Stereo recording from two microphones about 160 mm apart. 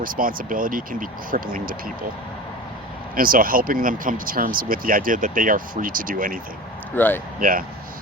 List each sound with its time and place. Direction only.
0.0 s speech: 60° right (ahead or behind)
3.2 s speech: 60° right (ahead or behind)
6.9 s speech: 10° left (ahead or behind)
7.3 s speech: 60° right (ahead or behind)